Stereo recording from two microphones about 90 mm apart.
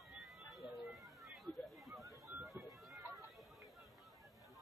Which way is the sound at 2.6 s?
25° right (ahead or behind).